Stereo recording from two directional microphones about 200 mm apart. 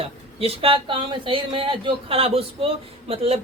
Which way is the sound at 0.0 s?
30° right (ahead or behind).